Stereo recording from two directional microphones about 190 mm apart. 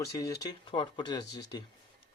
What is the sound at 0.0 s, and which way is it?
Speech, 20° left (ahead or behind).